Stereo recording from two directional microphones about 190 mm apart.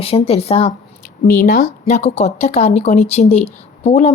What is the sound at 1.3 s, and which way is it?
A woman's voice, 45° left (ahead or behind).